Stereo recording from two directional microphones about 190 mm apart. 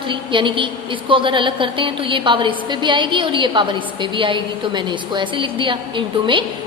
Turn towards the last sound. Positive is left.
turn(degrees=-25)  # may be behind; listen again after turning